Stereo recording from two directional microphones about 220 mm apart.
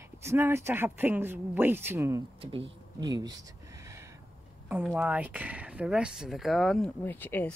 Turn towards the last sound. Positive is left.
turn(degrees=10)  # may be behind; listen again after turning